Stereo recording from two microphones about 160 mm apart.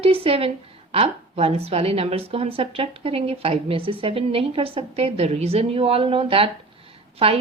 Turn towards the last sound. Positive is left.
turn(degrees=-35)  # may be behind; listen again after turning